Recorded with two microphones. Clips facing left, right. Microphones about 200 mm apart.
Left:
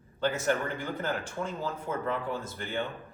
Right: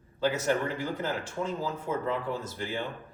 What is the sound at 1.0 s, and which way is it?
Speech, 5° right (ahead or behind).